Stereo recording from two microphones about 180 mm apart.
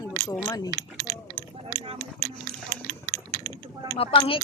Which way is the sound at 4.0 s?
30° left (ahead or behind).